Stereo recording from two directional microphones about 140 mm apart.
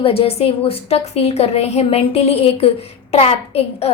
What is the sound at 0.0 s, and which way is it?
A woman's voice, 40° left (ahead or behind).